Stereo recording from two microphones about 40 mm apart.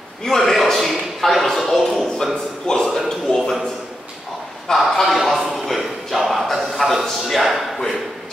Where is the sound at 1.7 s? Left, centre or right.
Centre.